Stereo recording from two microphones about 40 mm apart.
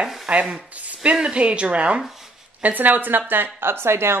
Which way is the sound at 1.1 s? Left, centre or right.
Right.